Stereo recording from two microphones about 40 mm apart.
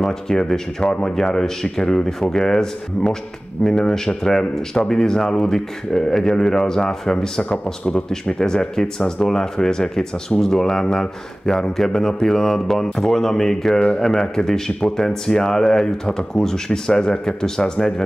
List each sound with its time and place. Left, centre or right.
0.0 s speech: centre
7.4 s speech: left; by 13.7 s centre
13.7 s speech: left